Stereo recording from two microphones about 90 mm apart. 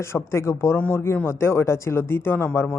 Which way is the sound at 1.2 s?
30° left (ahead or behind).